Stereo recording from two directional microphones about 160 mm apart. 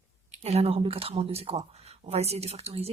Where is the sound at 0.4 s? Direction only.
40° right (ahead or behind).